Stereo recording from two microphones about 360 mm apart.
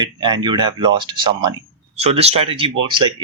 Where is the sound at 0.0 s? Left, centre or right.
Centre.